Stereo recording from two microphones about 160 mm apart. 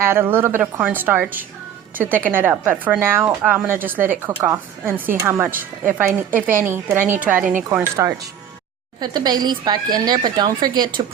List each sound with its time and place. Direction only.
0.0 s a woman's voice: 15° right (ahead or behind)